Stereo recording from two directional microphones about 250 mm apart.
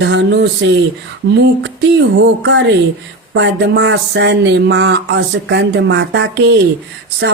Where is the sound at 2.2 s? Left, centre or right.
Right.